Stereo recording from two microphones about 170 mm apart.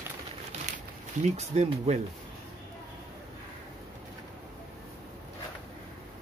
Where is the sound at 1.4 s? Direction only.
40° right (ahead or behind).